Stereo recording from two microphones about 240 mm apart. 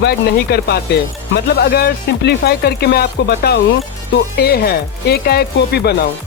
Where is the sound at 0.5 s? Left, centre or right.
Left.